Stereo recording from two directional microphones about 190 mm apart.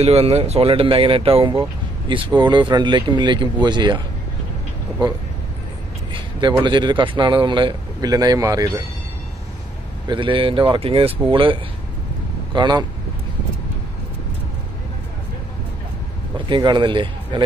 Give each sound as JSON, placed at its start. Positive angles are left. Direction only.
{"t": 0.0, "sound": "a man's voice", "side_deg": -30}
{"t": 6.1, "sound": "a man's voice", "side_deg": -25}
{"t": 10.0, "sound": "a man's voice", "side_deg": -25}
{"t": 12.5, "sound": "a man's voice", "side_deg": -25}
{"t": 16.3, "sound": "speech", "side_deg": -25}